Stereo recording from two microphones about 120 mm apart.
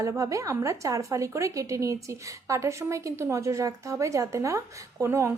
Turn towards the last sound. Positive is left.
turn(degrees=-25)  # may be behind; listen again after turning